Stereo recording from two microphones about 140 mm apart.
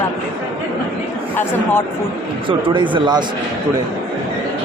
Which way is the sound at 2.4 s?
35° right (ahead or behind).